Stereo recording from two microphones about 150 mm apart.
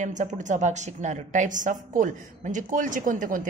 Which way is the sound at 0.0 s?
55° right (ahead or behind).